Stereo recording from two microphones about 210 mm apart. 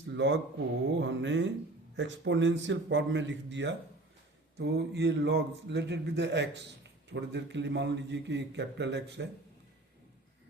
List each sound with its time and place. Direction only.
0.0 s speech: 60° right (ahead or behind)